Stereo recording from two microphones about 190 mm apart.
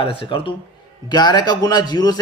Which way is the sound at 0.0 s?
25° left (ahead or behind).